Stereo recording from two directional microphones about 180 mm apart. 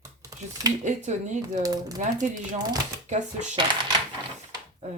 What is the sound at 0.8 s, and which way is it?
Speech, 40° right (ahead or behind).